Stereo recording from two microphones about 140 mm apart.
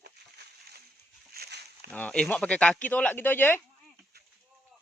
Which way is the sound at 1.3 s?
90° right.